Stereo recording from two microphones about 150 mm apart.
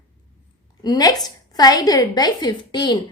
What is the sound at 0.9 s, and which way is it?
A woman's voice, 25° left (ahead or behind).